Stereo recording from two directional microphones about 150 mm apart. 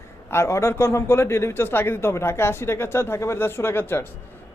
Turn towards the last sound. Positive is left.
turn(degrees=15)  # may be behind; listen again after turning